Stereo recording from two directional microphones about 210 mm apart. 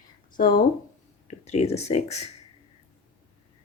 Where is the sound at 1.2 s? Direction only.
30° left (ahead or behind).